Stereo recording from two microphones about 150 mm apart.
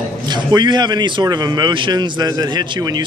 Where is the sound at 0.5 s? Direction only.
30° right (ahead or behind).